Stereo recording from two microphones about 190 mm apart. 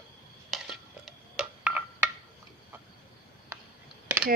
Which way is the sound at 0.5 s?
Centre (ahead or behind).